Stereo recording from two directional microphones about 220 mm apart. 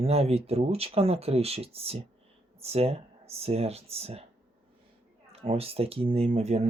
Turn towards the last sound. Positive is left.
turn(degrees=-30)  # may be behind; listen again after turning